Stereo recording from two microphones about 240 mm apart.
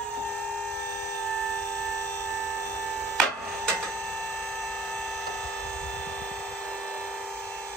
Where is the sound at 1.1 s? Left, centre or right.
Centre.